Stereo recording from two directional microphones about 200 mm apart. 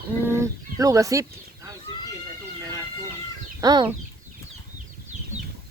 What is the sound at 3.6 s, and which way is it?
Speech, 20° right (ahead or behind).